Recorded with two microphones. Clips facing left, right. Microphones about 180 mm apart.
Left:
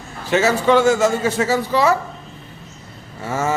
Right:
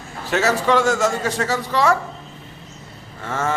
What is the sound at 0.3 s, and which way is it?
A man's voice, centre (ahead or behind).